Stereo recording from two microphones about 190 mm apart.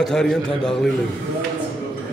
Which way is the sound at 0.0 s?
Centre (ahead or behind).